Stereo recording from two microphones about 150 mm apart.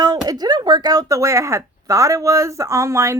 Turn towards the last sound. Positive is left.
turn(degrees=-20)  # may be behind; listen again after turning